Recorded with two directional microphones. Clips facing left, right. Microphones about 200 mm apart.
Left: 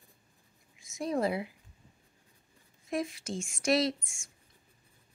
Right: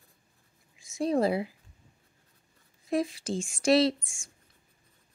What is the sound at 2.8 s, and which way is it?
A woman's voice, 35° right (ahead or behind).